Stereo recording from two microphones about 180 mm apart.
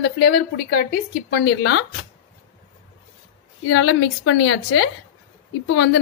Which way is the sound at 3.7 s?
90° left.